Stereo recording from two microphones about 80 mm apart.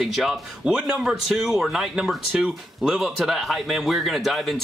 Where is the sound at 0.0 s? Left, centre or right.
Centre.